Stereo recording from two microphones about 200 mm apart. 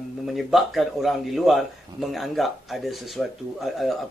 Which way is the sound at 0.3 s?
Centre (ahead or behind).